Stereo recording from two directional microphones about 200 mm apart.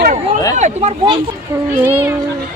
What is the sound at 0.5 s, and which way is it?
Speech, 35° right (ahead or behind).